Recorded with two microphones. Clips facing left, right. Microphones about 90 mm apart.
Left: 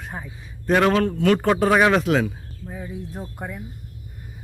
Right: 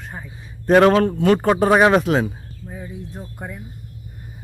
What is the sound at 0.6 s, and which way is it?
Speech, 40° right (ahead or behind).